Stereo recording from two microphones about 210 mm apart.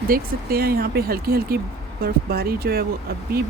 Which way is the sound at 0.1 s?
45° right (ahead or behind).